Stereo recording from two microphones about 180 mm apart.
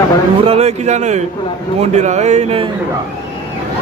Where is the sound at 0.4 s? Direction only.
35° right (ahead or behind).